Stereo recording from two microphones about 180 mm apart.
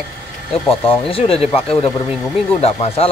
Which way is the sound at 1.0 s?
30° left (ahead or behind).